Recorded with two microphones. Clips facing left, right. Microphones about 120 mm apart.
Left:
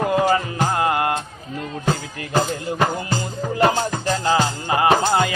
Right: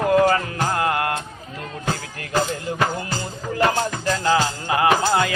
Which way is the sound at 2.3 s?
15° left (ahead or behind).